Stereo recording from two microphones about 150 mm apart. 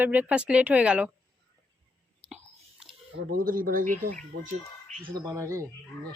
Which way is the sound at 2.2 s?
5° right (ahead or behind).